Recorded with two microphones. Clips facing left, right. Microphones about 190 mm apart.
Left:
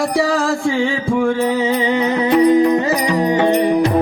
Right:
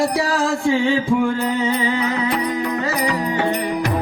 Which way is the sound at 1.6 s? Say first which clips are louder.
Left 4 dB; 25° left (ahead or behind).